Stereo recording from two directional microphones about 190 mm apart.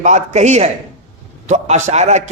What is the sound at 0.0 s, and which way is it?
A man's voice, 40° right (ahead or behind).